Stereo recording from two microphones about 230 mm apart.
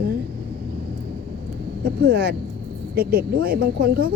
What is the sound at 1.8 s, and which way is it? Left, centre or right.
Speech, right.